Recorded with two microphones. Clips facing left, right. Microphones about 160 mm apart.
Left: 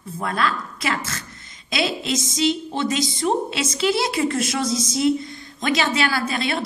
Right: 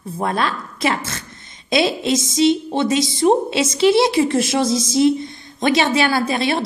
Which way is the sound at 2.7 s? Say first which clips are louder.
Right 5 dB; 25° right (ahead or behind).